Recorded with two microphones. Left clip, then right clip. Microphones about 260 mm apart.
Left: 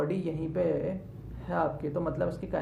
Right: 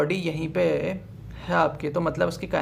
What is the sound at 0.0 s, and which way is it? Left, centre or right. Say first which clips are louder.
Speech: right 6 dB; right.